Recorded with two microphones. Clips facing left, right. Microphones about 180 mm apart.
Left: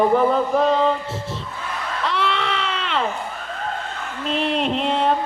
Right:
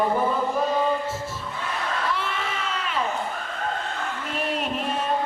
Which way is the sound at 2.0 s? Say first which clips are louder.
Left 5 dB; 70° left (ahead or behind).